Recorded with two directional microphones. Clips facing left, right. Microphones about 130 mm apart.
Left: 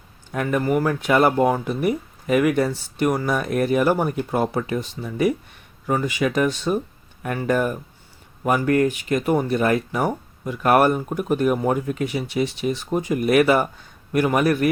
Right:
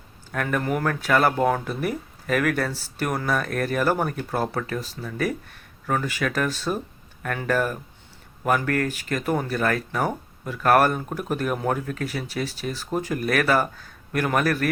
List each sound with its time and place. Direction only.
0.5 s speech: 5° left (ahead or behind)
1.0 s speech: 20° left (ahead or behind)